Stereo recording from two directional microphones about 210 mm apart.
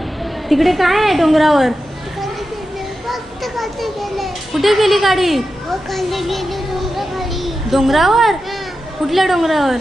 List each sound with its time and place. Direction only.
0.5 s a woman's voice: centre (ahead or behind)
3.1 s children playing: centre (ahead or behind)
9.0 s a woman's voice: centre (ahead or behind)